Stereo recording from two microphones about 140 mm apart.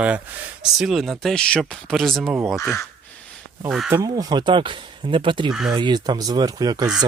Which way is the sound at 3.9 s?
20° right (ahead or behind).